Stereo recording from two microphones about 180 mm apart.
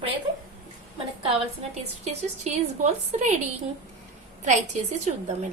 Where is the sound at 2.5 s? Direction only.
40° right (ahead or behind).